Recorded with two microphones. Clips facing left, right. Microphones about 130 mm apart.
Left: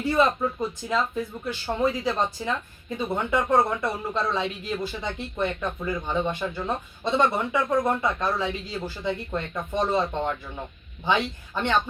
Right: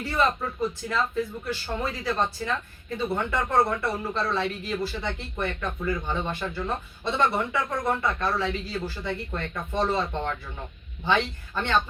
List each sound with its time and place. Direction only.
0.0 s speech: 20° left (ahead or behind)